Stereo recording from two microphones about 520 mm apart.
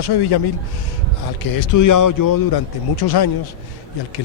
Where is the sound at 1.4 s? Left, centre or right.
Left.